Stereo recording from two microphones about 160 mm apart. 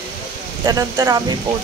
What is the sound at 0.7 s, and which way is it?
Speech, 20° right (ahead or behind).